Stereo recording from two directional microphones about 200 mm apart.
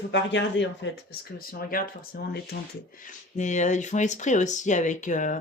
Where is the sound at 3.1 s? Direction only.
35° left (ahead or behind).